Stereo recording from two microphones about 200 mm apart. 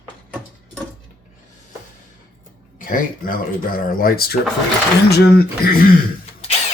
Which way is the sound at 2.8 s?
45° left (ahead or behind).